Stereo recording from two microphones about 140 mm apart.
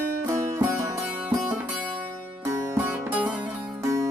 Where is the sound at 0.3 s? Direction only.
20° right (ahead or behind).